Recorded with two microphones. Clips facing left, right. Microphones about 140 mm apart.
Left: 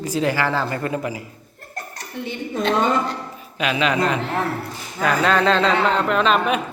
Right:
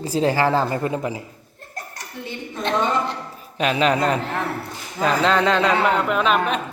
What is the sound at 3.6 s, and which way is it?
Speech, 35° right (ahead or behind).